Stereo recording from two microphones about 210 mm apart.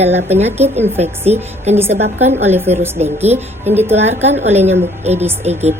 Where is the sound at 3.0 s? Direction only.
30° right (ahead or behind).